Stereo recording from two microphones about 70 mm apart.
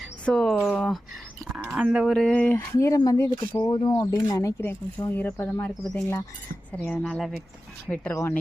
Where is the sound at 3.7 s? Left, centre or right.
Left.